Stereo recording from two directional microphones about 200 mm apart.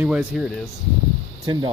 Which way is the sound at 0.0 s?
5° right (ahead or behind).